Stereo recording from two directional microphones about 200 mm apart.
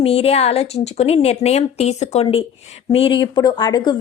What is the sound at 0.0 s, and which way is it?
A woman's voice, 30° left (ahead or behind).